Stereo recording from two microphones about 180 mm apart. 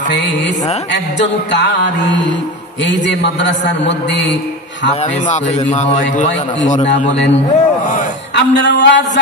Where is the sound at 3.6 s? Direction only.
75° left (ahead or behind).